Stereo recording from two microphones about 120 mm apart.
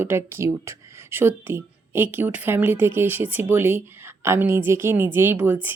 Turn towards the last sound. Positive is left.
turn(degrees=-20)  # may be behind; listen again after turning